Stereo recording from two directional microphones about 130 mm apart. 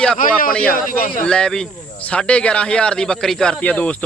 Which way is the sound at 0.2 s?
90° left.